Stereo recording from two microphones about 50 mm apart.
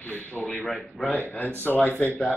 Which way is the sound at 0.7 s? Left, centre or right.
Centre.